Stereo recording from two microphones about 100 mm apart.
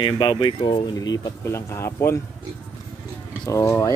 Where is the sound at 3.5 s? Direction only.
30° left (ahead or behind).